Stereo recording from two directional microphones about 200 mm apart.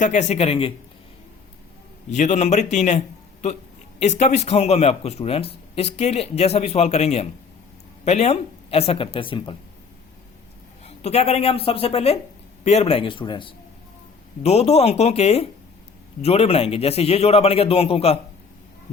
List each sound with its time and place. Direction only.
0.0 s speech: 35° left (ahead or behind)
2.0 s speech: 35° left (ahead or behind)
4.0 s a man's voice: 35° left (ahead or behind)
10.8 s a man's voice: 30° left (ahead or behind)